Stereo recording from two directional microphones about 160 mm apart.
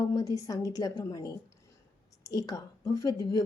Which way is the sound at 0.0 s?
20° left (ahead or behind).